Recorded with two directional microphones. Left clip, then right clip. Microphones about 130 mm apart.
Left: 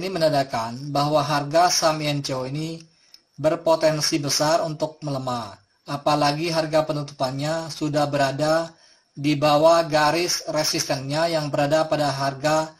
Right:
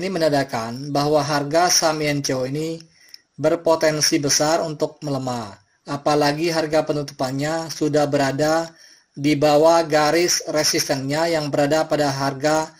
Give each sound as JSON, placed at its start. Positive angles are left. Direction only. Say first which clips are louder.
{"t": 0.0, "sound": "speech", "louder": "right 1 dB", "side_deg": -40}